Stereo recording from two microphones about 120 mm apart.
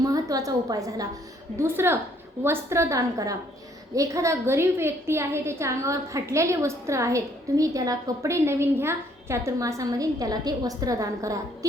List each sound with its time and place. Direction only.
0.0 s a woman's voice: 30° right (ahead or behind)
1.5 s a woman's voice: 20° right (ahead or behind)